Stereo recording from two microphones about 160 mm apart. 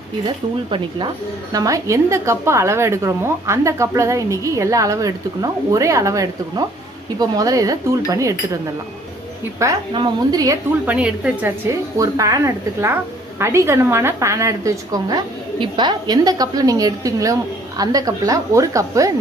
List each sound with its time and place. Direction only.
0.7 s speech: 30° right (ahead or behind)
1.5 s a woman's voice: 20° right (ahead or behind)
9.9 s a woman's voice: 25° right (ahead or behind)
10.8 s a woman's voice: 5° right (ahead or behind)
13.4 s a woman's voice: 15° right (ahead or behind)